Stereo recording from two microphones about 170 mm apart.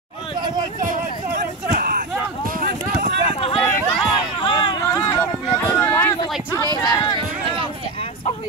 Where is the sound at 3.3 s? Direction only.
35° left (ahead or behind); by 6.1 s 15° left (ahead or behind).